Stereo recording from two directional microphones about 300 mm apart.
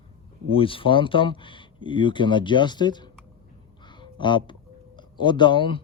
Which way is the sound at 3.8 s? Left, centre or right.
Centre.